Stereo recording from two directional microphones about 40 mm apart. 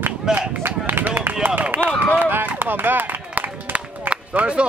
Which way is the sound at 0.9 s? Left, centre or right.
Right.